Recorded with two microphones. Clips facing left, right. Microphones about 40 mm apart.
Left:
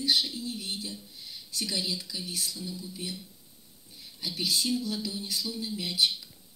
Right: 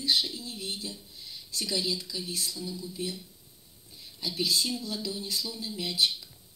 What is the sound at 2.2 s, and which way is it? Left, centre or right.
Speech, left.